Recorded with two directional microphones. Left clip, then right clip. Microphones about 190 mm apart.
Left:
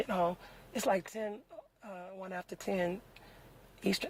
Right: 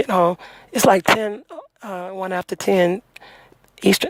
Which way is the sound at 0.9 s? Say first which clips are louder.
Right 18 dB; 40° right (ahead or behind).